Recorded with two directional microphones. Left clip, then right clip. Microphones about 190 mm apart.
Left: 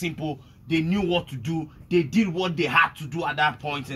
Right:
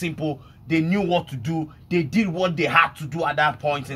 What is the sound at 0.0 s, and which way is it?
Speech, 5° right (ahead or behind).